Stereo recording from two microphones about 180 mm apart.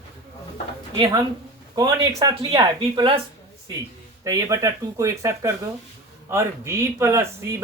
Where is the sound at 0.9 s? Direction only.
25° right (ahead or behind).